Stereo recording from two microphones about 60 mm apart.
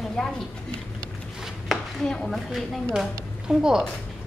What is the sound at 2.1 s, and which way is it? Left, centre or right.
Speech, centre.